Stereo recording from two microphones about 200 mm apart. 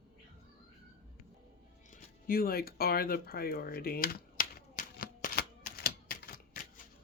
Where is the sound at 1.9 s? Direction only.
45° left (ahead or behind).